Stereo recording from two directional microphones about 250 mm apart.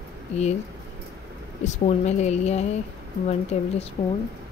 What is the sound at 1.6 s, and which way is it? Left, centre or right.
A woman's voice, left.